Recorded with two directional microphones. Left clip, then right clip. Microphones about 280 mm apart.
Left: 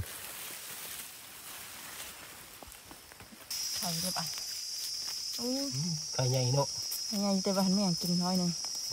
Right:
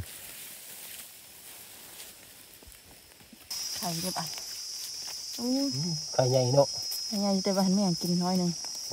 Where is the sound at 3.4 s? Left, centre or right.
Centre.